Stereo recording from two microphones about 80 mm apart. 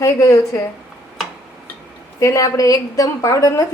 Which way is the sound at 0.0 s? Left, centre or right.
Left.